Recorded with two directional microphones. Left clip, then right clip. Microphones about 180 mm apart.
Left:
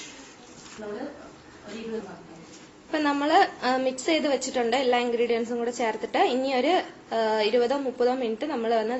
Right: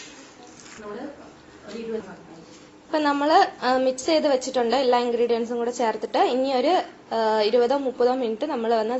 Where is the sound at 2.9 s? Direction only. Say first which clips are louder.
Right 3 dB; 10° right (ahead or behind).